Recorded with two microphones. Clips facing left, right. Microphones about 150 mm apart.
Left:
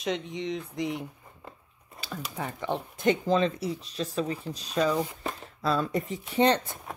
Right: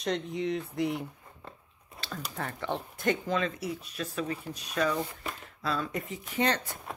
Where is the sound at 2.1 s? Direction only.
5° left (ahead or behind).